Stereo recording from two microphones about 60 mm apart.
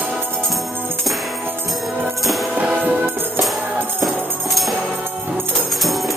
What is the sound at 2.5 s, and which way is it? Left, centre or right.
Music, right.